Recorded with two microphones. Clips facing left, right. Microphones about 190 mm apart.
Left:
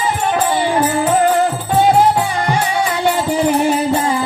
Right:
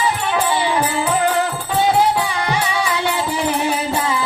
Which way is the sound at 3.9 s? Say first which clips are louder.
Left 3 dB; 45° left (ahead or behind).